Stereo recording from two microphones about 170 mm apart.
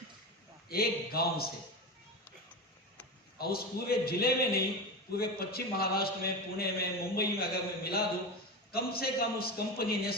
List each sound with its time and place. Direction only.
0.7 s a man's voice: 65° left (ahead or behind)
3.3 s a man's voice: 65° left (ahead or behind)